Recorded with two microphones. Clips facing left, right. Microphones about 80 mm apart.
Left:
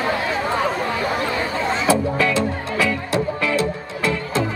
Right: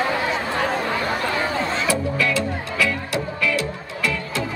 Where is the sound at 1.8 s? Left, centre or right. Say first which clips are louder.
Left 4 dB; left.